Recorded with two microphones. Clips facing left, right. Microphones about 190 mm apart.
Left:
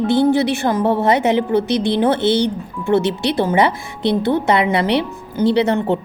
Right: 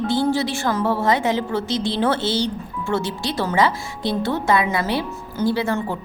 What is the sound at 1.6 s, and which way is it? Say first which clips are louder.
Music: left 6 dB; 60° left (ahead or behind).